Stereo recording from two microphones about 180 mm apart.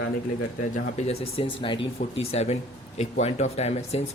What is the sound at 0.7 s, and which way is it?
Speech, 35° left (ahead or behind).